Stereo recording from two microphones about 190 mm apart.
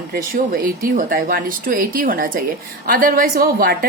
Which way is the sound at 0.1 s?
50° right (ahead or behind).